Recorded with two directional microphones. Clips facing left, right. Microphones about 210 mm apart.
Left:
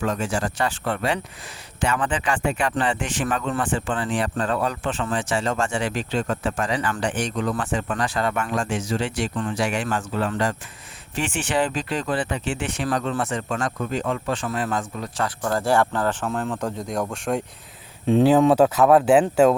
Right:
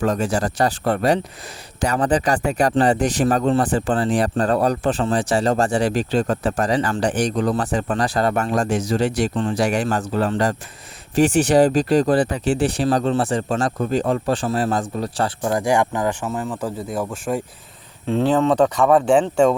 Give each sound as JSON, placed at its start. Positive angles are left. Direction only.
{"t": 0.0, "sound": "speech", "side_deg": -40}
{"t": 9.3, "sound": "speech", "side_deg": -25}
{"t": 9.6, "sound": "speech", "side_deg": -40}
{"t": 15.4, "sound": "speech", "side_deg": -15}
{"t": 18.0, "sound": "speech", "side_deg": 15}